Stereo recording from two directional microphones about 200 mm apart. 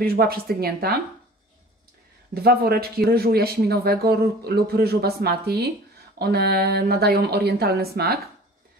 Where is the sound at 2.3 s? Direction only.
50° right (ahead or behind).